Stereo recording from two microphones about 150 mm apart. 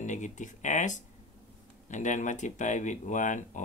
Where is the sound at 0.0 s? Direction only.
55° left (ahead or behind).